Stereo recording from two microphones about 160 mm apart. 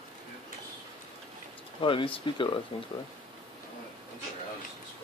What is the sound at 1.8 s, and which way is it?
Speech, 35° left (ahead or behind).